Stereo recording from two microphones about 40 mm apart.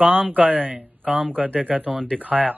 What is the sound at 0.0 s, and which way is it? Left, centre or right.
Speech, right.